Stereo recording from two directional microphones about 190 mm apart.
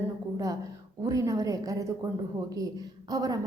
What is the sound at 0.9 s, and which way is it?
A woman's voice, 15° right (ahead or behind).